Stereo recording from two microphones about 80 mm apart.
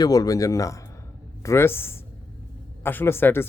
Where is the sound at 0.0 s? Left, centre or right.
Left.